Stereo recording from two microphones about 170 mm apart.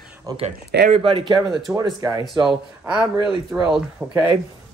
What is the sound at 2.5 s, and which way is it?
Speech, 5° right (ahead or behind).